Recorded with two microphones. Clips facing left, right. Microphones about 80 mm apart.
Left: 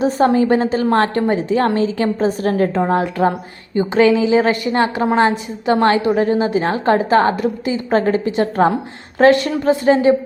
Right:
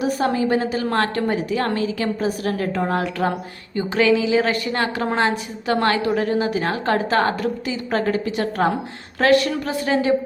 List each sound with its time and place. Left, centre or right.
0.0 s a woman's voice: left